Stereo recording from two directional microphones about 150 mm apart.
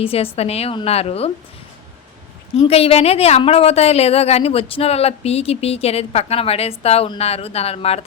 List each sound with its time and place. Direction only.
0.0 s a woman's voice: 40° left (ahead or behind)
2.6 s a woman's voice: 40° left (ahead or behind)